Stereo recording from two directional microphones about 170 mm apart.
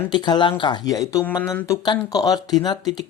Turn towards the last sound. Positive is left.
turn(degrees=25)  # may be behind; listen again after turning